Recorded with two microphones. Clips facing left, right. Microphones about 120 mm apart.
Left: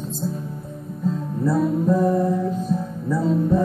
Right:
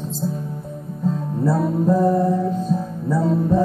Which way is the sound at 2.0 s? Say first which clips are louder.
Right 3 dB; 5° right (ahead or behind).